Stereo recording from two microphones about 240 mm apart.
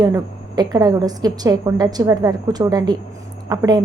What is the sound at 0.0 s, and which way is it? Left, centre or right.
A woman's voice, centre.